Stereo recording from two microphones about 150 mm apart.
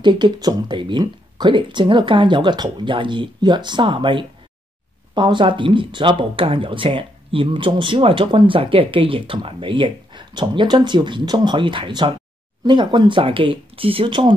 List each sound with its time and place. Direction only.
0.0 s speech: 30° right (ahead or behind)